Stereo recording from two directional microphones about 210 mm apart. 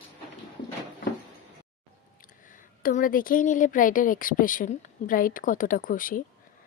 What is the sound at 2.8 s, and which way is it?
A woman's voice, 40° left (ahead or behind).